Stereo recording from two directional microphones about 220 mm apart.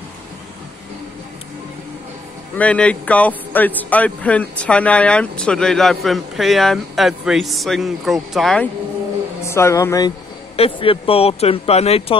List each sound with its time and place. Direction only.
2.5 s a man's voice: 5° left (ahead or behind)
9.4 s speech: 10° left (ahead or behind)
10.5 s speech: 25° left (ahead or behind)